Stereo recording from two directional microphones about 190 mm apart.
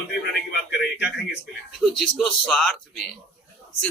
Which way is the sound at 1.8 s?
Centre (ahead or behind).